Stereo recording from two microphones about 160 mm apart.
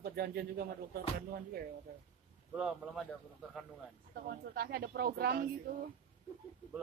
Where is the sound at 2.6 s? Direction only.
5° right (ahead or behind).